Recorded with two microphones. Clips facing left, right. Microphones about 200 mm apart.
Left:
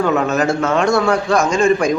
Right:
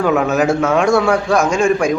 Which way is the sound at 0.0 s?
5° right (ahead or behind).